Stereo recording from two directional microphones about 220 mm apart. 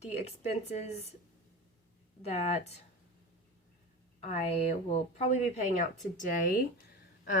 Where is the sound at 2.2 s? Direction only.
30° left (ahead or behind).